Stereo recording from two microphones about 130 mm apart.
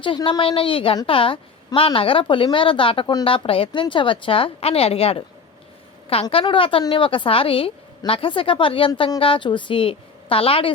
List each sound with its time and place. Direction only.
0.0 s a woman's voice: 40° left (ahead or behind)
6.4 s a woman's voice: 40° left (ahead or behind)